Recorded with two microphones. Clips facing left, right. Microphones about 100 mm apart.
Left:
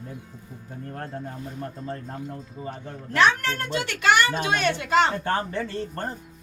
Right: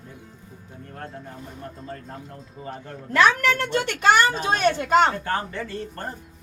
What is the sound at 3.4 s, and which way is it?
A child's voice, 75° right (ahead or behind).